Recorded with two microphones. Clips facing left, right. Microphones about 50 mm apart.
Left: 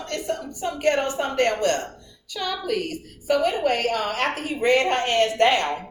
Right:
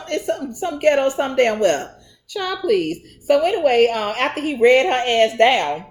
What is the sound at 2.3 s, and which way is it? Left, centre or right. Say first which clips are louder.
A woman's voice: right 7 dB; right.